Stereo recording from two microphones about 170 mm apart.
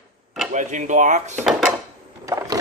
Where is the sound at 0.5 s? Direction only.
45° right (ahead or behind).